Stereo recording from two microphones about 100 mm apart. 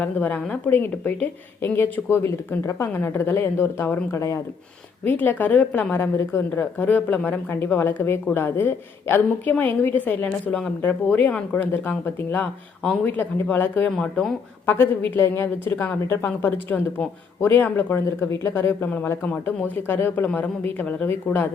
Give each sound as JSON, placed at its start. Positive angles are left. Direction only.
{"t": 0.0, "sound": "speech", "side_deg": 15}
{"t": 5.0, "sound": "speech", "side_deg": 15}
{"t": 13.9, "sound": "speech", "side_deg": 5}
{"t": 14.7, "sound": "speech", "side_deg": 20}